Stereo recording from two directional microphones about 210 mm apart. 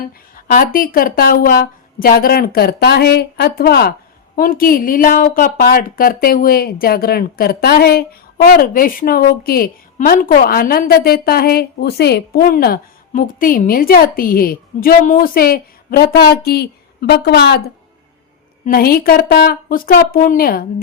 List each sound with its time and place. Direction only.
0.3 s a woman's voice: 40° left (ahead or behind)
18.6 s a woman's voice: 45° left (ahead or behind)